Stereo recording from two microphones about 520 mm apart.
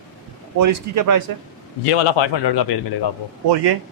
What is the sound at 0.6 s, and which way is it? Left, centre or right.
Speech, right.